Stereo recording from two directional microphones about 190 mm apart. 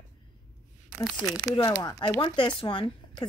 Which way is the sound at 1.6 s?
20° left (ahead or behind).